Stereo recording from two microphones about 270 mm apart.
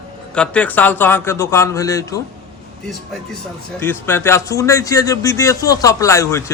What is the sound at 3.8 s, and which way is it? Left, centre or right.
Speech, centre.